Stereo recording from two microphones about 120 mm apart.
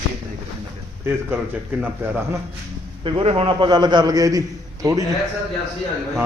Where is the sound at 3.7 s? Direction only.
35° right (ahead or behind).